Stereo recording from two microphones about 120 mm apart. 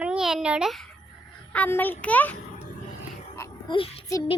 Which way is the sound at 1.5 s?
15° left (ahead or behind).